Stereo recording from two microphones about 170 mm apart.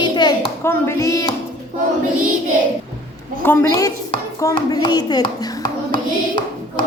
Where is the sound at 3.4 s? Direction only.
15° left (ahead or behind).